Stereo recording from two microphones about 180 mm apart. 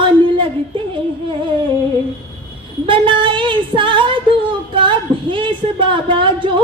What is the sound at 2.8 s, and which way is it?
A woman's voice, 30° right (ahead or behind).